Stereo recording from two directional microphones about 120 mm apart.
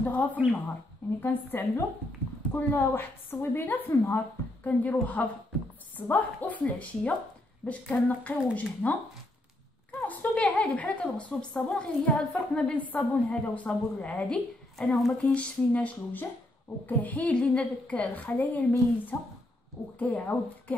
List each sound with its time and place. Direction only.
0.0 s a woman's voice: 15° left (ahead or behind)